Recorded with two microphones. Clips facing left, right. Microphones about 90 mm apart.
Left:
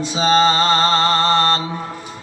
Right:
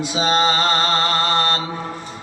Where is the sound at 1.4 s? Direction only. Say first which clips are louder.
Left 3 dB; 30° left (ahead or behind).